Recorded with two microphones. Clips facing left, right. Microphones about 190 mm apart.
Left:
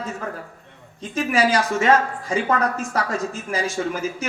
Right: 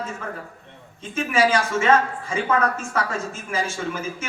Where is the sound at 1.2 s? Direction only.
35° left (ahead or behind).